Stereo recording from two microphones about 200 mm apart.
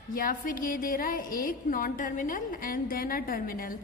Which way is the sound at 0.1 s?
45° left (ahead or behind).